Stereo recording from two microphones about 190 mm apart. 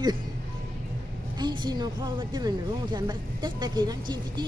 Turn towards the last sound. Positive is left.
turn(degrees=-20)  # may be behind; listen again after turning